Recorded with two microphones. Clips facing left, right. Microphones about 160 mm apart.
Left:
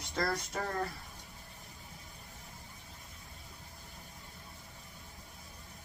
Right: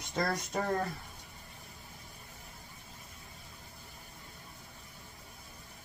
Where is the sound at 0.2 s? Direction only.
20° right (ahead or behind).